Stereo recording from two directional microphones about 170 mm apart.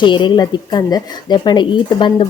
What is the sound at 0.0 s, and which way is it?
Speech, 30° left (ahead or behind).